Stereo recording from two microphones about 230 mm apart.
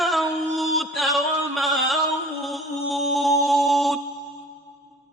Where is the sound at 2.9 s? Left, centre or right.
Centre.